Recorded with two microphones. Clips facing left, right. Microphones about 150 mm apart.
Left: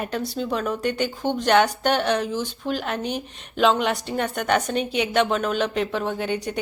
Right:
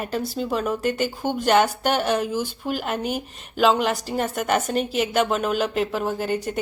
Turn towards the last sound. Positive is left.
turn(degrees=0)  # may be behind; listen again after turning